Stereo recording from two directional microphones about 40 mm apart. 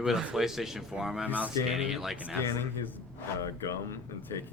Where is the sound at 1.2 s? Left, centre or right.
Right.